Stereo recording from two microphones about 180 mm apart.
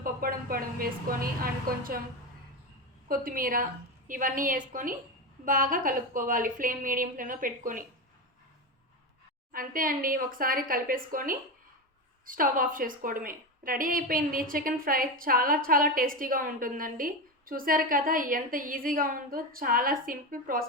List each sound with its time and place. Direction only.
0.0 s a woman's voice: 55° right (ahead or behind)
3.1 s a woman's voice: 50° right (ahead or behind)
9.5 s a woman's voice: 50° right (ahead or behind)